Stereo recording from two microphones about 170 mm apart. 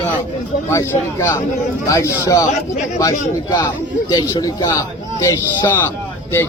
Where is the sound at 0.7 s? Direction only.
15° left (ahead or behind).